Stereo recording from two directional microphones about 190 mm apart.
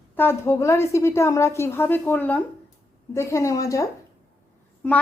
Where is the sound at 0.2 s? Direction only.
10° left (ahead or behind).